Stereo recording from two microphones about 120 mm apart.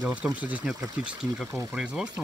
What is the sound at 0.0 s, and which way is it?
Speech, 10° right (ahead or behind).